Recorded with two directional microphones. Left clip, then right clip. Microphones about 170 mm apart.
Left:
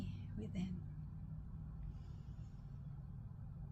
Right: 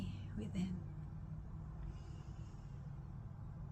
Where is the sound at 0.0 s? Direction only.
20° right (ahead or behind).